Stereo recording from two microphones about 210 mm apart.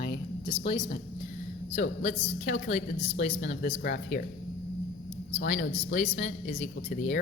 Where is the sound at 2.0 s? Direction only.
30° left (ahead or behind).